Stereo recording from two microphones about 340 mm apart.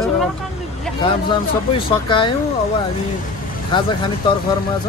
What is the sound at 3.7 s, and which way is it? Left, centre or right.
Speech, centre.